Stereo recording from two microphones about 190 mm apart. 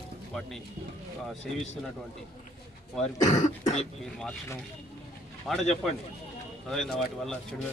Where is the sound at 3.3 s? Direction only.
40° left (ahead or behind).